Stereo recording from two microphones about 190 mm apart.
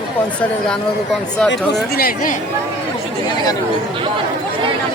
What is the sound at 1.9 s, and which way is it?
Speech, 50° left (ahead or behind).